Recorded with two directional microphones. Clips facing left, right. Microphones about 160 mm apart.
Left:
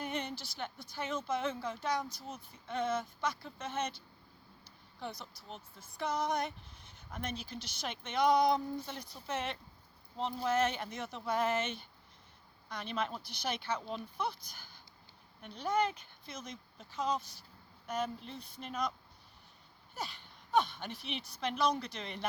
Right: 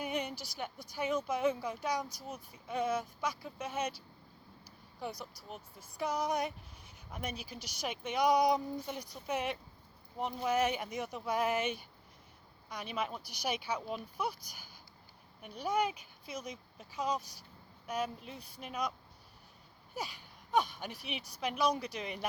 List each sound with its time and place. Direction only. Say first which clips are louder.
0.0 s a sound: right 2 dB; 10° right (ahead or behind)
0.9 s speech: right 2 dB; 15° right (ahead or behind)
4.9 s speech: right 2 dB; 10° right (ahead or behind)
20.0 s speech: right 1 dB; 10° right (ahead or behind)